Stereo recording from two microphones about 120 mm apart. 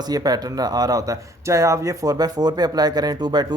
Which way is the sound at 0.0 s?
35° right (ahead or behind).